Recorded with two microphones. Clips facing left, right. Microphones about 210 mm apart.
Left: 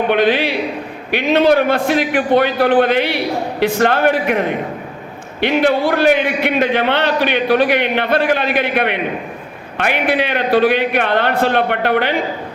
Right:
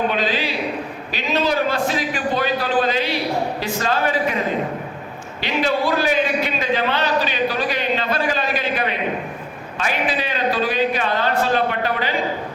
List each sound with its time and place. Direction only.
0.1 s a man's voice: 65° left (ahead or behind)